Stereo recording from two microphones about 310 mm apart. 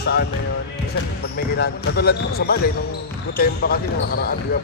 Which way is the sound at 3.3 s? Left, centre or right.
Left.